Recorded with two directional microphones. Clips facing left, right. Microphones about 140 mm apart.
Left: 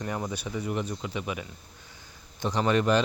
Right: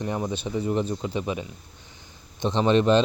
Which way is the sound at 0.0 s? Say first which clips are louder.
Right 4 dB; 20° right (ahead or behind).